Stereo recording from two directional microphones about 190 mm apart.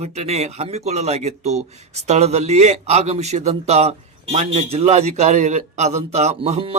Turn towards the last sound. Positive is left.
turn(degrees=-30)  # may be behind; listen again after turning